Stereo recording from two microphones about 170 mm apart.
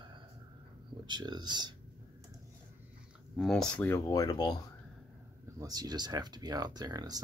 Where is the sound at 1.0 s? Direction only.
25° right (ahead or behind).